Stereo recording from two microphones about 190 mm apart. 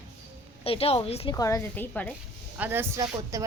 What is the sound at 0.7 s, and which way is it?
Speech, 30° left (ahead or behind).